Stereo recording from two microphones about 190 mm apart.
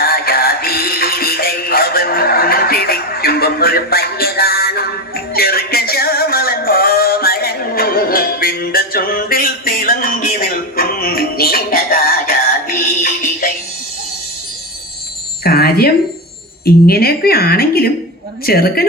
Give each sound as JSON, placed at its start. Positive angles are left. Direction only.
{"t": 0.0, "sound": "music", "side_deg": 50}
{"t": 15.4, "sound": "a sound", "side_deg": 55}
{"t": 16.6, "sound": "a woman's voice", "side_deg": 55}